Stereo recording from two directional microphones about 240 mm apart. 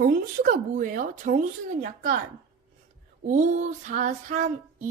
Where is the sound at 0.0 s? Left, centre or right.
Right.